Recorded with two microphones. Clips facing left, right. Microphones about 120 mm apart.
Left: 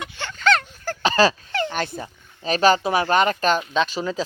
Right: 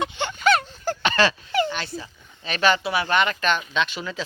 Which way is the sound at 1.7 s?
50° left (ahead or behind).